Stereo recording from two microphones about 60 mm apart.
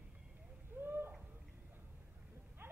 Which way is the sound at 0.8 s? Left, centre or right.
Right.